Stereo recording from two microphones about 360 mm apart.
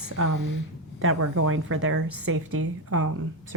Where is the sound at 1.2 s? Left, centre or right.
Right.